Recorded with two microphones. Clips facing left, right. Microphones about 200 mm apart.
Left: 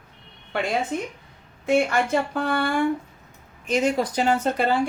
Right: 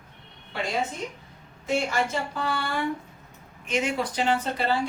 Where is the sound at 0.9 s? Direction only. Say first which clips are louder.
Left 7 dB; 60° left (ahead or behind).